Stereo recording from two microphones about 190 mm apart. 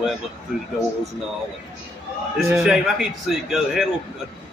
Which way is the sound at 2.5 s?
5° right (ahead or behind).